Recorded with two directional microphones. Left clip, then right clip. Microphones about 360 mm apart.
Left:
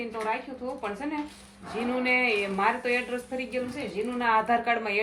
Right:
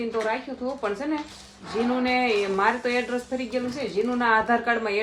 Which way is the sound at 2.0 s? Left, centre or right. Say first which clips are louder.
Even; centre.